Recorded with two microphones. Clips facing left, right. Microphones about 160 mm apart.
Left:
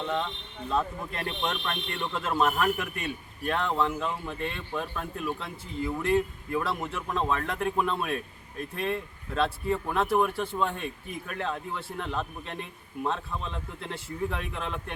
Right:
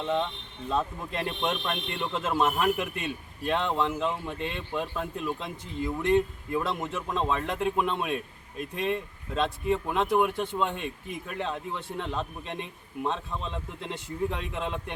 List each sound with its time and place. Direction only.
1.1 s speech: 20° right (ahead or behind)